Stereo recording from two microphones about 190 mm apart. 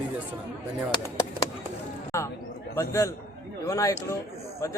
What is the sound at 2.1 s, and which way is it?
A man's voice, 15° left (ahead or behind).